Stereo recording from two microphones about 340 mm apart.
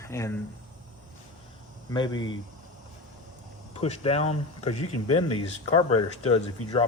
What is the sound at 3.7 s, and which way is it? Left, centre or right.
Speech, centre.